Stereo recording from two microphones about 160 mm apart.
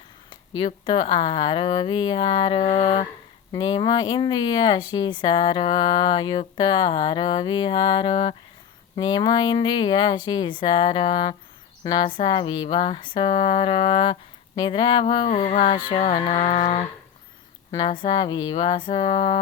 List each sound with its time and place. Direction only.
0.3 s speech: 30° left (ahead or behind)
3.5 s speech: 25° left (ahead or behind)
15.2 s speech: 45° left (ahead or behind)
17.7 s speech: 25° left (ahead or behind)